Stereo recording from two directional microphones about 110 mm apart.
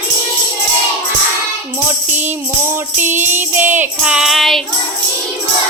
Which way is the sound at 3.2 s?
15° right (ahead or behind).